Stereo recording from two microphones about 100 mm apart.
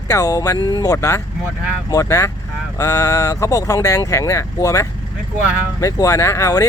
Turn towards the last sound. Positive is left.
turn(degrees=30)  # may be behind; listen again after turning